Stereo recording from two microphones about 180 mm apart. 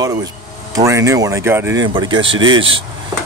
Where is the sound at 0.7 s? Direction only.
15° right (ahead or behind).